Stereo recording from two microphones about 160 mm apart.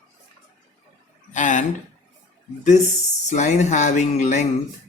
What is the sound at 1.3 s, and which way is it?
Speech, 50° left (ahead or behind).